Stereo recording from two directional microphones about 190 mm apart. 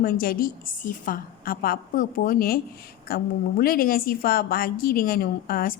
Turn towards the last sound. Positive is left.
turn(degrees=50)  # may be behind; listen again after turning